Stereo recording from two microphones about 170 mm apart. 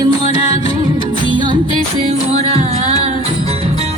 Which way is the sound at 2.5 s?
40° right (ahead or behind).